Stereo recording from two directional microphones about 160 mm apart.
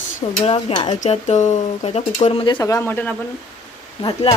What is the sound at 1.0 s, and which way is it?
Speech, 50° left (ahead or behind).